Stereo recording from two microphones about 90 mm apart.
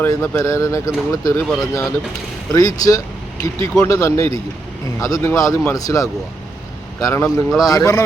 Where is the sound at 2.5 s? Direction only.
40° left (ahead or behind).